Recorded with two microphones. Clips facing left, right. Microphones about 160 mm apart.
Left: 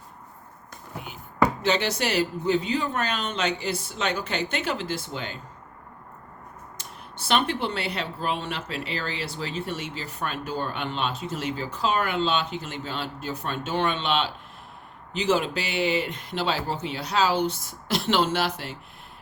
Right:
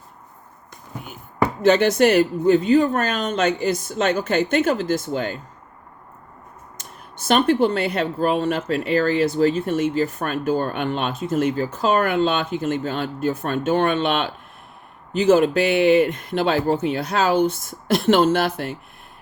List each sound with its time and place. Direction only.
1.6 s speech: 50° right (ahead or behind)
6.7 s speech: 45° right (ahead or behind)